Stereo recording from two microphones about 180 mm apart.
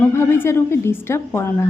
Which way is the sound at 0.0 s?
15° left (ahead or behind).